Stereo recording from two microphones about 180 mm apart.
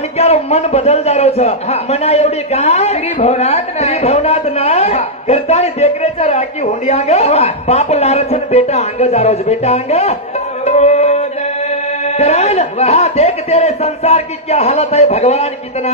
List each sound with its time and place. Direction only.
0.2 s a man's voice: 35° left (ahead or behind)
10.6 s music: 40° left (ahead or behind)
12.2 s a man's voice: 35° left (ahead or behind)